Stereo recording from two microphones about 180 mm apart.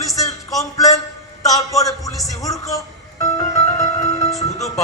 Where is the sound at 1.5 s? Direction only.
20° left (ahead or behind).